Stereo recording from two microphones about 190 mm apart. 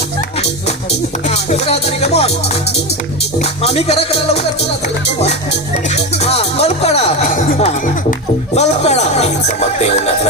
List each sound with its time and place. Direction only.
1.3 s music: 35° left (ahead or behind)
3.6 s music: 30° left (ahead or behind)
6.2 s music: 35° left (ahead or behind)